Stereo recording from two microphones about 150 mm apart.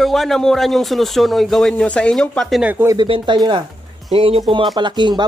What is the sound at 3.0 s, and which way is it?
Speech, 30° right (ahead or behind).